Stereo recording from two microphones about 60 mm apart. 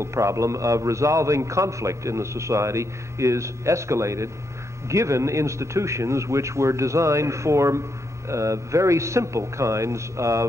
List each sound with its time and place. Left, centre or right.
0.0 s a man's voice: right